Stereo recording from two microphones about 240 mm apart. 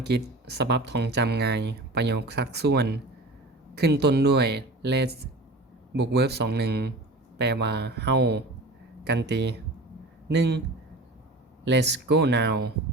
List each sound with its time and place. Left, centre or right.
0.1 s speech: right
11.6 s speech: right